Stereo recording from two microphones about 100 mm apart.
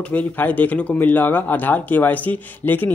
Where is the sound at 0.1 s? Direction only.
15° left (ahead or behind).